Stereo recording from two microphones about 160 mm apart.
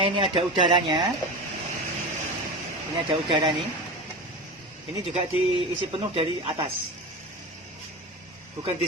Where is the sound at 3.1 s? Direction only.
30° right (ahead or behind).